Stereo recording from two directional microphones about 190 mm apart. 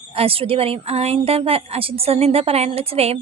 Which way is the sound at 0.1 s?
30° right (ahead or behind).